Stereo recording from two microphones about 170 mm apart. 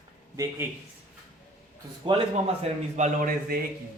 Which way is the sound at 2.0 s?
30° right (ahead or behind).